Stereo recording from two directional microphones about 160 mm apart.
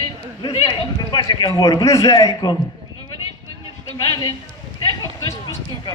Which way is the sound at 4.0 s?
25° left (ahead or behind).